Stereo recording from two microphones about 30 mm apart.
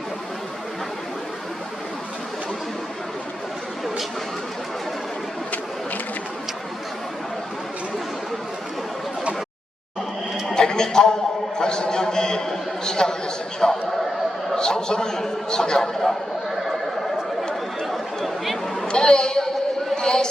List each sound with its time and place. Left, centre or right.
10.5 s neigh: left
11.5 s a man's voice: left
18.9 s a sound: left